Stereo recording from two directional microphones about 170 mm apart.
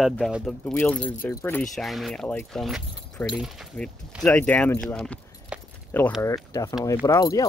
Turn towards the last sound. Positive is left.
turn(degrees=20)  # may be behind; listen again after turning